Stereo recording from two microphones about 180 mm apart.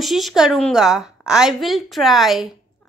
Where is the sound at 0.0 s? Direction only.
Centre (ahead or behind).